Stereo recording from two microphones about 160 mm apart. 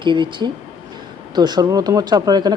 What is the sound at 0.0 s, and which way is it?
Speech, 30° right (ahead or behind).